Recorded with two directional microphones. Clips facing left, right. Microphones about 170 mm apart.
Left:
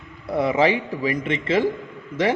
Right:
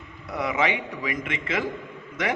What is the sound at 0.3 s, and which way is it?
A man's voice, 30° left (ahead or behind).